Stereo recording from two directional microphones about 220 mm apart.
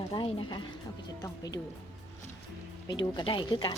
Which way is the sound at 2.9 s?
20° left (ahead or behind).